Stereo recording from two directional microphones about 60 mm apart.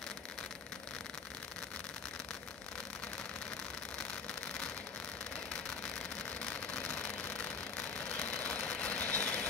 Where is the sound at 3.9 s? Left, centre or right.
Centre.